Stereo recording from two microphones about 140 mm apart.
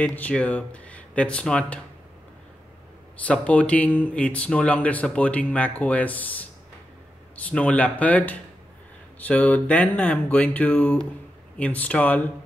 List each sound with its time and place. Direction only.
0.0 s speech: 10° left (ahead or behind)
3.3 s speech: 10° left (ahead or behind)